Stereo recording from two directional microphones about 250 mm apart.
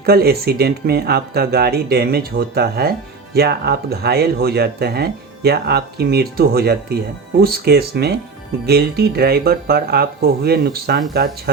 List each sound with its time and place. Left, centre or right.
0.0 s speech: right